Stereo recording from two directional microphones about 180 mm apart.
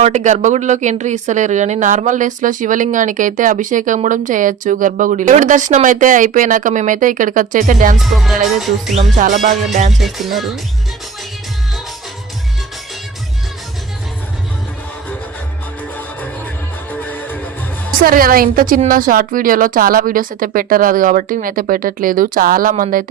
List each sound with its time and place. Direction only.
0.0 s a woman's voice: 40° right (ahead or behind)
7.9 s music: centre (ahead or behind)
10.0 s music: centre (ahead or behind)
16.9 s music: 10° left (ahead or behind)
18.0 s a woman's voice: 55° right (ahead or behind)